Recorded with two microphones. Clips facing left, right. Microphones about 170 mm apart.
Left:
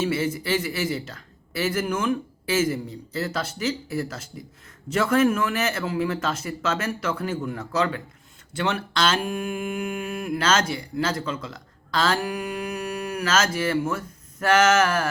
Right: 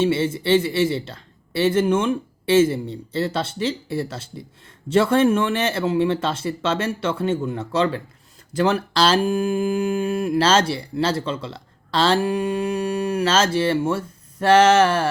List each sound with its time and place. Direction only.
0.0 s speech: 30° right (ahead or behind)